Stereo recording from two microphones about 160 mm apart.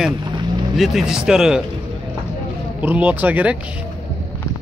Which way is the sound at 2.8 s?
10° right (ahead or behind).